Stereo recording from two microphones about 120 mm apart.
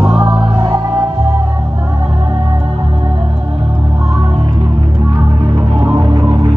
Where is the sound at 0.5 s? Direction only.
25° right (ahead or behind).